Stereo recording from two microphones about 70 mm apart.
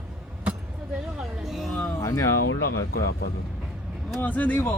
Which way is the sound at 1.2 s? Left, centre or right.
Centre.